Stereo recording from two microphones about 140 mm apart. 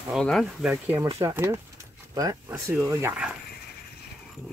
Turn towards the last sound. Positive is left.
turn(degrees=-5)  # may be behind; listen again after turning